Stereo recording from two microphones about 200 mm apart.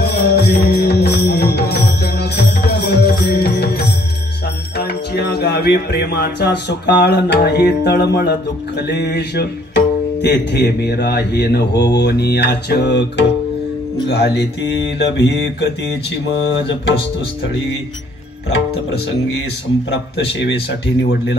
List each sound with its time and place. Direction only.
0.0 s music: 55° left (ahead or behind)
4.7 s speech: 55° left (ahead or behind)
12.0 s mantra: 55° left (ahead or behind)